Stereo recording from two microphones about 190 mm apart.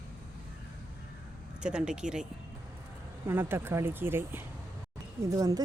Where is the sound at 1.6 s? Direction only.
5° right (ahead or behind).